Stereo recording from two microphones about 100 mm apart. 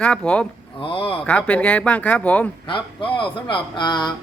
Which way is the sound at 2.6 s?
60° left (ahead or behind).